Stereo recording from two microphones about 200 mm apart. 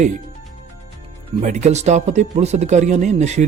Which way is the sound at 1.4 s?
35° right (ahead or behind).